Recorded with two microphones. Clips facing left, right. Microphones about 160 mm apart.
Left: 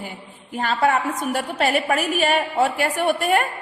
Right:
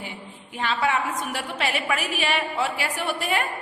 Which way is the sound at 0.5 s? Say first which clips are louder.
Left 4 dB; 45° left (ahead or behind).